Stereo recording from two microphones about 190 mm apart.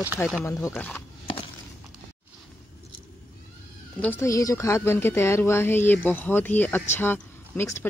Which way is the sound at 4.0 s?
10° left (ahead or behind).